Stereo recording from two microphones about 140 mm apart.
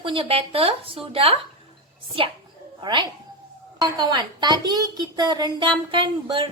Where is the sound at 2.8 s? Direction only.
35° right (ahead or behind).